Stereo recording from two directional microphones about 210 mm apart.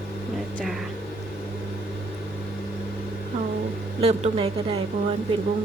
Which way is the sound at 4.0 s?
30° right (ahead or behind).